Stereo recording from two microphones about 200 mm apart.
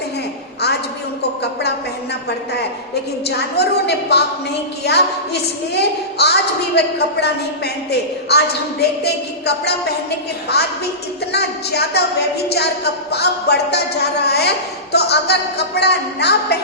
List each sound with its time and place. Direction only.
2.5 s a woman's voice: 55° left (ahead or behind)